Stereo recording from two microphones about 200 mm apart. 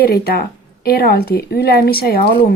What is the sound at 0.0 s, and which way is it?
Speech, 50° left (ahead or behind).